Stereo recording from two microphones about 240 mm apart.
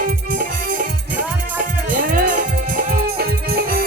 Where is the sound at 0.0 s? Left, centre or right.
Right.